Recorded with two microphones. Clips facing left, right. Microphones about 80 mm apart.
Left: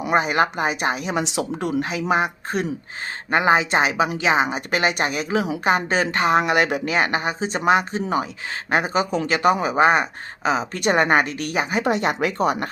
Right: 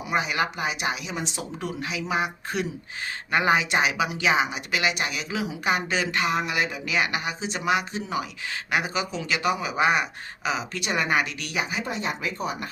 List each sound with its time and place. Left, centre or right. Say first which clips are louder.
0.0 s speech: left 7 dB; left
1.1 s speech: left 8 dB; left
1.8 s speech: left 4 dB; left
3.3 s speech: left 4 dB; left
6.4 s speech: left 8 dB; left
6.8 s speech: left 5 dB; left
11.8 s speech: left 9 dB; left